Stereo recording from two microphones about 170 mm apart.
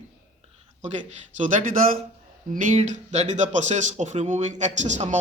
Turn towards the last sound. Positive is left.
turn(degrees=-45)  # may be behind; listen again after turning